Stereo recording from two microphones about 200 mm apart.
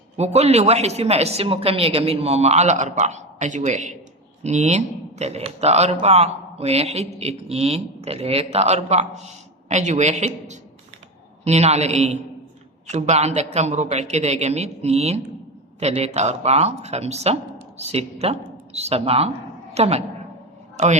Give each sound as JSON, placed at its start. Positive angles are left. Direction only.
{"t": 0.2, "sound": "a man's voice", "side_deg": -30}